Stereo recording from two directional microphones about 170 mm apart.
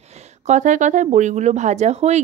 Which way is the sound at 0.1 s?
45° right (ahead or behind).